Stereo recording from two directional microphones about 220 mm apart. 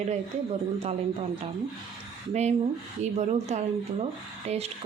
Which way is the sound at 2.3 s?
30° right (ahead or behind).